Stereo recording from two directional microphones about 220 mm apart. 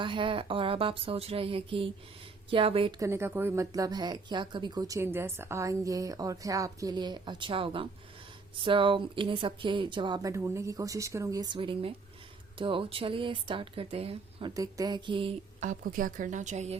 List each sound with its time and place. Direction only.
0.0 s speech: 25° right (ahead or behind)
3.1 s speech: 10° right (ahead or behind); by 16.7 s 30° right (ahead or behind)